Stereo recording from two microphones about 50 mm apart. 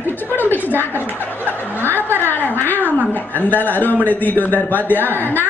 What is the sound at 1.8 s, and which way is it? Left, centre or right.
A man's voice, left.